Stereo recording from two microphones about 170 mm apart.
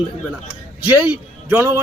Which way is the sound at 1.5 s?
15° right (ahead or behind).